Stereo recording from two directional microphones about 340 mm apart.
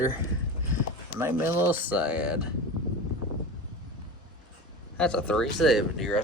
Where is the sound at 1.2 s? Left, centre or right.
Centre.